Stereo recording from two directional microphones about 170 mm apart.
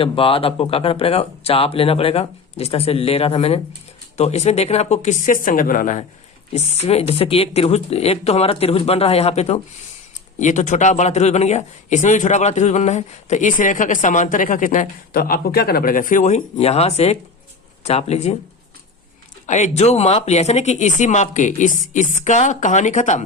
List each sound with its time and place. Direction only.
0.0 s speech: 35° left (ahead or behind); by 6.1 s 50° left (ahead or behind)
6.5 s speech: 40° left (ahead or behind)
19.5 s speech: 45° left (ahead or behind)